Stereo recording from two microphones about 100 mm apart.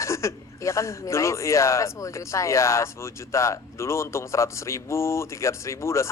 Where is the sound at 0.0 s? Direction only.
30° left (ahead or behind).